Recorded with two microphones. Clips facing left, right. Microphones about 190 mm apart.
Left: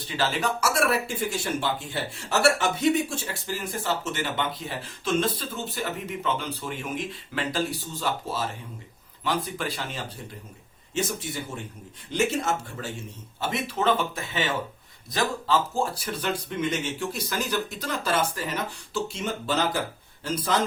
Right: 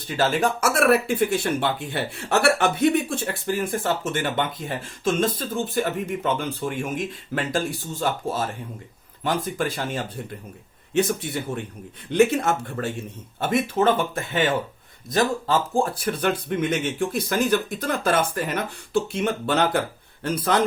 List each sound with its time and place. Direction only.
0.2 s speech: 50° right (ahead or behind)
10.9 s speech: 60° right (ahead or behind)